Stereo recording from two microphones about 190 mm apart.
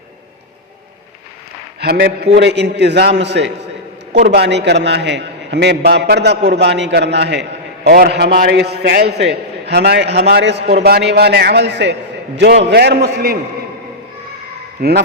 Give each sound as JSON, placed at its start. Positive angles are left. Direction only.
{"t": 1.8, "sound": "a man's voice", "side_deg": -60}
{"t": 7.9, "sound": "a man's voice", "side_deg": -55}
{"t": 14.8, "sound": "a man's voice", "side_deg": -55}